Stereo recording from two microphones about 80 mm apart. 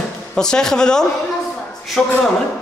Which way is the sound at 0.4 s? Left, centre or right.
Centre.